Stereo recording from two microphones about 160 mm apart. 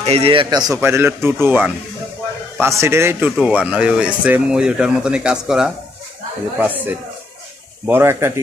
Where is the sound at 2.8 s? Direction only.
15° right (ahead or behind).